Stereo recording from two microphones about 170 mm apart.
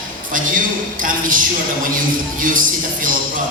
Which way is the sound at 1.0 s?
55° right (ahead or behind).